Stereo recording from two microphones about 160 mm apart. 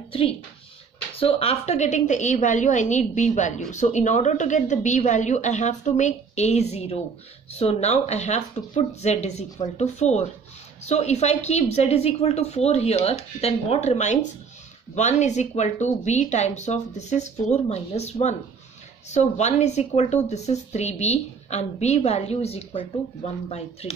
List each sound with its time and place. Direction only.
1.2 s speech: 40° left (ahead or behind)